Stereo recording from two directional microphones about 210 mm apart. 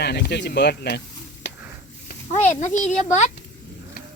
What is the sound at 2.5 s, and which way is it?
Speech, 35° left (ahead or behind).